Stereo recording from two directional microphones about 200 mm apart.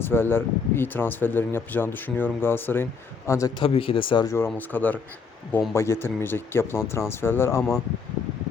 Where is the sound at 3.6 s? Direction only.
25° left (ahead or behind).